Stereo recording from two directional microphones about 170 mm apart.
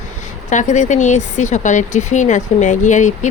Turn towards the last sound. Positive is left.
turn(degrees=45)  # may be behind; listen again after turning